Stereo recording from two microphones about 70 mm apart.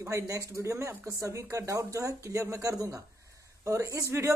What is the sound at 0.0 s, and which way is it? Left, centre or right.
Speech, right.